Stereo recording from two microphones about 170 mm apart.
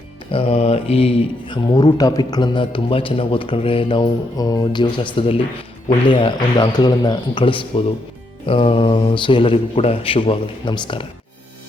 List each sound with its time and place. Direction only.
0.3 s speech: 35° left (ahead or behind)